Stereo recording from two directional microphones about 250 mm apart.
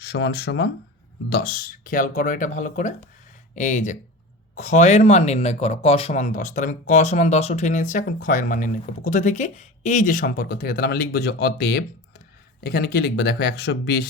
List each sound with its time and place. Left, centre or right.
0.0 s speech: left